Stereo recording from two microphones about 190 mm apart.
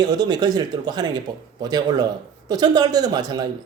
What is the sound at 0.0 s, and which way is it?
A man's voice, 20° right (ahead or behind).